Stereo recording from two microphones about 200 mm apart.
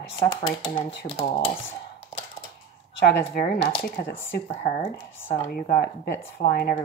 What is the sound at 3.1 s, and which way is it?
Speech, 50° left (ahead or behind).